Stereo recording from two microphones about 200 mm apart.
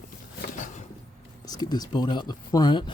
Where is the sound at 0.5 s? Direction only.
40° left (ahead or behind).